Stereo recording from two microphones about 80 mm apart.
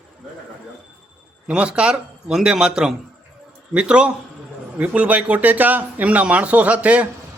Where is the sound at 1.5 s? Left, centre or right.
Centre.